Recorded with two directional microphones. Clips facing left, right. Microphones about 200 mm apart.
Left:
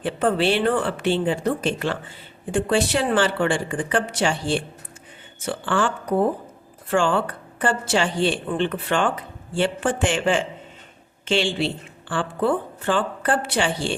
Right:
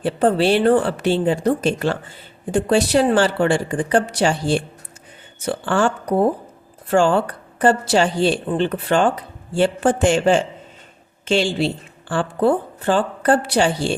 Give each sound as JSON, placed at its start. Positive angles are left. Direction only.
{"t": 0.0, "sound": "speech", "side_deg": -40}